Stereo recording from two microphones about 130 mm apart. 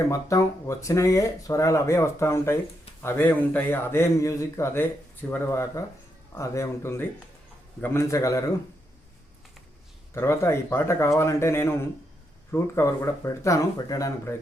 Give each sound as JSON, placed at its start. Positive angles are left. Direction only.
{"t": 0.1, "sound": "speech", "side_deg": 25}
{"t": 10.2, "sound": "speech", "side_deg": 20}